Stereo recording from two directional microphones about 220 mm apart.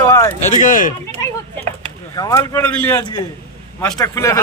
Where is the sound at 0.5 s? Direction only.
35° left (ahead or behind).